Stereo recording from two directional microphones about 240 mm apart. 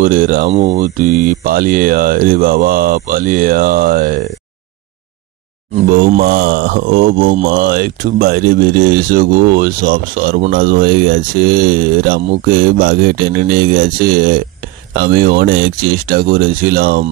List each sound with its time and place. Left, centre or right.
0.0 s speech: right
5.9 s speech: right